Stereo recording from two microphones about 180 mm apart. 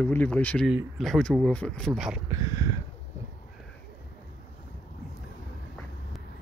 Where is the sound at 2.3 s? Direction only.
20° right (ahead or behind).